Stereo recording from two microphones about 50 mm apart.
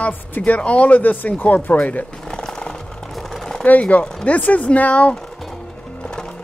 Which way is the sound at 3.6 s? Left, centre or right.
Left.